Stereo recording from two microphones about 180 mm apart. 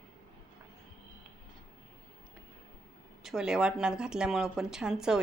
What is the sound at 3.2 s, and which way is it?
A woman's voice, 5° right (ahead or behind).